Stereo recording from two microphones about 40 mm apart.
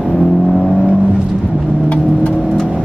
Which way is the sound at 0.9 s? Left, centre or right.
Centre.